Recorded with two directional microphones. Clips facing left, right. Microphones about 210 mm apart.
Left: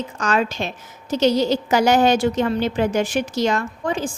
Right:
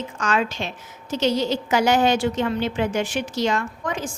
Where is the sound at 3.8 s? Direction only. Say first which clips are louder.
Left 4 dB; 30° left (ahead or behind).